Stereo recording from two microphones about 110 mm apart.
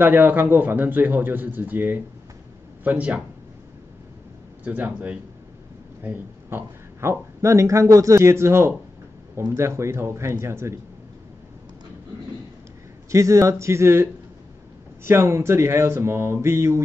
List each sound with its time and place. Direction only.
0.0 s speech: 20° right (ahead or behind)
4.6 s speech: 15° right (ahead or behind)
13.1 s speech: 30° right (ahead or behind)
15.0 s speech: 25° right (ahead or behind)